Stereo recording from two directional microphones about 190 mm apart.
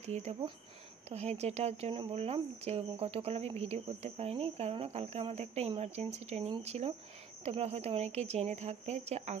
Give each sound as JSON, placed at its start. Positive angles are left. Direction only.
{"t": 0.0, "sound": "speech", "side_deg": -35}